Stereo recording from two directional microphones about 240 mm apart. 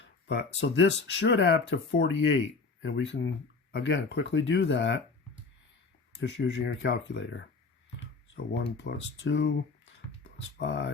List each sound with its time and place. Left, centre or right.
0.0 s speech: left
6.1 s speech: left
10.6 s speech: left